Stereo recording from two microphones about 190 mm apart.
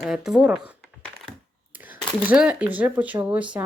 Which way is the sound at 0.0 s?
5° right (ahead or behind).